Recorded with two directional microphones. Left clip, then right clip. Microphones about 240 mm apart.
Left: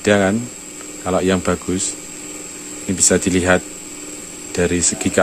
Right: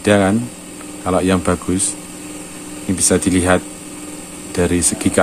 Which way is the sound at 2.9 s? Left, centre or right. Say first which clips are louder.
Even; centre.